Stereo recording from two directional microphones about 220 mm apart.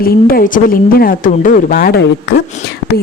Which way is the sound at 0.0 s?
40° left (ahead or behind).